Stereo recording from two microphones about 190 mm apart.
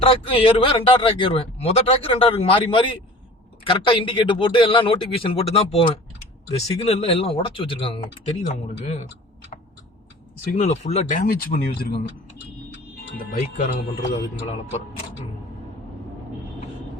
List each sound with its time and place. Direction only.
0.0 s speech: 30° left (ahead or behind)
10.5 s speech: 35° left (ahead or behind)
11.3 s speech: 50° left (ahead or behind)
13.1 s speech: 55° left (ahead or behind)